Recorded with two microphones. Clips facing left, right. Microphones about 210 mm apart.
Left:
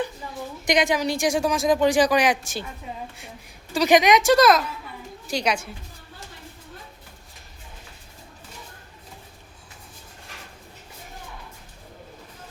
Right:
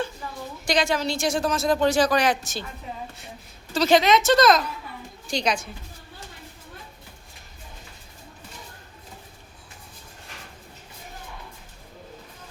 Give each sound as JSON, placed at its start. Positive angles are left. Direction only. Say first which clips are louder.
{"t": 0.7, "sound": "speech", "louder": "left 2 dB", "side_deg": 15}
{"t": 3.7, "sound": "a woman's voice", "louder": "left 1 dB", "side_deg": 15}